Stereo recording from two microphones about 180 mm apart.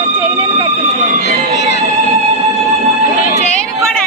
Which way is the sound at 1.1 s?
50° right (ahead or behind).